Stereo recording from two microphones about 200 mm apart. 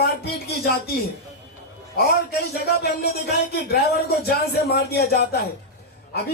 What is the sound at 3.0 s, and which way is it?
A man's voice, 50° left (ahead or behind).